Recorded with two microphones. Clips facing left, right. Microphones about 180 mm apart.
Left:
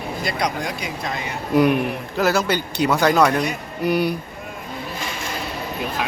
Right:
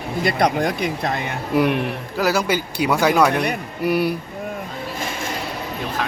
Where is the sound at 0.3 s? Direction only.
55° right (ahead or behind).